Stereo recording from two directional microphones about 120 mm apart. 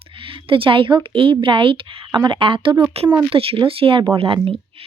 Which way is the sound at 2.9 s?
55° right (ahead or behind).